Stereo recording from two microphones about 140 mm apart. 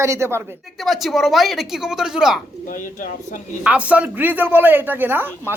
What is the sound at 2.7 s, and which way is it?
Speech, 75° left (ahead or behind).